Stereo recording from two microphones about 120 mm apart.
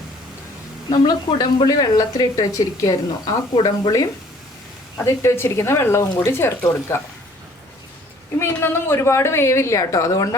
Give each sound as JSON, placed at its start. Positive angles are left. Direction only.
{"t": 0.9, "sound": "speech", "side_deg": 35}
{"t": 5.0, "sound": "speech", "side_deg": 20}
{"t": 8.4, "sound": "speech", "side_deg": 20}